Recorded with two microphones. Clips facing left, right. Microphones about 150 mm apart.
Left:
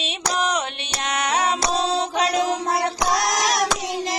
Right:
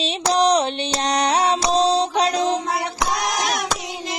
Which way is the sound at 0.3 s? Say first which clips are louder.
Right 7 dB; 35° right (ahead or behind).